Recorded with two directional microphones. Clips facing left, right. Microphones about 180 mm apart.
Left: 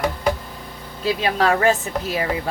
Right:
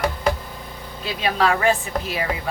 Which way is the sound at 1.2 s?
40° left (ahead or behind).